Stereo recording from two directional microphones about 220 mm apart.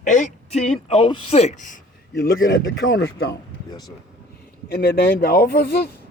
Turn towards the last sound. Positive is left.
turn(degrees=45)  # may be behind; listen again after turning